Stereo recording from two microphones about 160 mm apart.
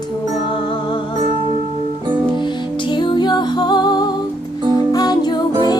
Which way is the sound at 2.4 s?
30° left (ahead or behind).